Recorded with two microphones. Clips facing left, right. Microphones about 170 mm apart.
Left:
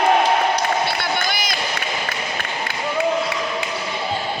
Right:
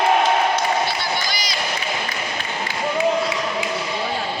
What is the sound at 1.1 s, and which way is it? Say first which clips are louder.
Crowd: left 2 dB; 55° left (ahead or behind).